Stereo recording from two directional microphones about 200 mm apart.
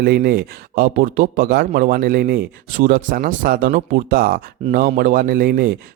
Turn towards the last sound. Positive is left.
turn(degrees=-45)  # may be behind; listen again after turning